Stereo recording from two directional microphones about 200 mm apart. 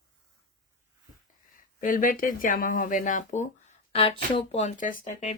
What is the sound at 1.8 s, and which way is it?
Speech, 45° left (ahead or behind).